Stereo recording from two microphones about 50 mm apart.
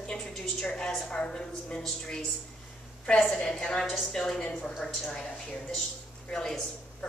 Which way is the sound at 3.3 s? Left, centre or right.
Centre.